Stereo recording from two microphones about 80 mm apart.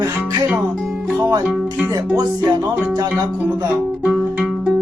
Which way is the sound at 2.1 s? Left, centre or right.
Right.